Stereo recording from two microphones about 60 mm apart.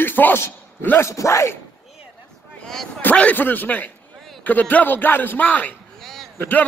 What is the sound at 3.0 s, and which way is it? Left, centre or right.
A man's voice, left.